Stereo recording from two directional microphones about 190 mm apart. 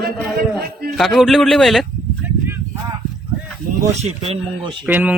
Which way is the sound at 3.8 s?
35° right (ahead or behind).